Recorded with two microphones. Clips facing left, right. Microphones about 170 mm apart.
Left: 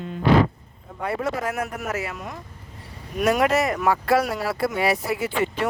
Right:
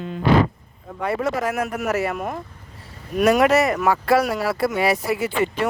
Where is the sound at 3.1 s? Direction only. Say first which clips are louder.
Right 4 dB; 80° right.